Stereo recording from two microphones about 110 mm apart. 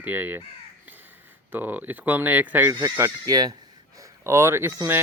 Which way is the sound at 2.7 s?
30° right (ahead or behind).